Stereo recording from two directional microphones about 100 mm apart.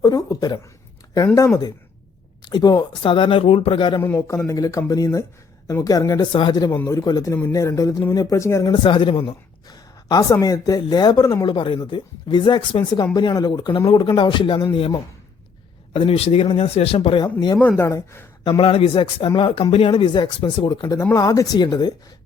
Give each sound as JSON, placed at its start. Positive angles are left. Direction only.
{"t": 0.0, "sound": "a sound", "side_deg": 40}
{"t": 2.4, "sound": "speech", "side_deg": 45}
{"t": 4.0, "sound": "speech", "side_deg": 30}
{"t": 6.3, "sound": "speech", "side_deg": 50}
{"t": 8.7, "sound": "speech", "side_deg": 55}
{"t": 9.6, "sound": "a sound", "side_deg": 40}
{"t": 10.4, "sound": "speech", "side_deg": 35}
{"t": 11.5, "sound": "speech", "side_deg": 55}
{"t": 14.7, "sound": "a man's voice", "side_deg": 70}
{"t": 17.7, "sound": "speech", "side_deg": 30}
{"t": 18.4, "sound": "speech", "side_deg": 60}
{"t": 20.9, "sound": "speech", "side_deg": 35}